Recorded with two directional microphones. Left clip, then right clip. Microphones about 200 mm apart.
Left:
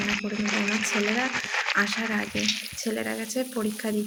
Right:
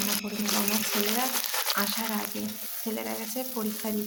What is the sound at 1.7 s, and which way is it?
Speech, 10° left (ahead or behind).